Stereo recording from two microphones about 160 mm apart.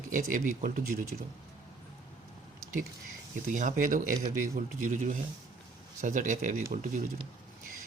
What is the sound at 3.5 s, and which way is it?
Speech, 50° right (ahead or behind).